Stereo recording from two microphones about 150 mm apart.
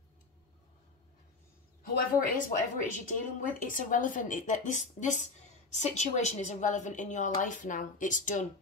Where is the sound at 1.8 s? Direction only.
75° left (ahead or behind).